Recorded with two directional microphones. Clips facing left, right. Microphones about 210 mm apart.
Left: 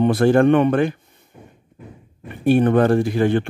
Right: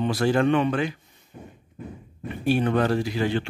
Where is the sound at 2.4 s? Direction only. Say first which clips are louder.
Left 7 dB; 50° left (ahead or behind).